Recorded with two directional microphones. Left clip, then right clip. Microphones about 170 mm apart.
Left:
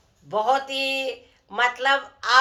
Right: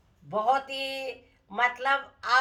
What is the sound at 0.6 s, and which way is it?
Speech, 35° left (ahead or behind).